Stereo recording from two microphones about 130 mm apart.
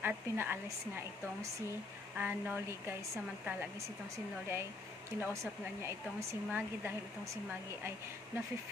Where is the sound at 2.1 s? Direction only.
15° right (ahead or behind).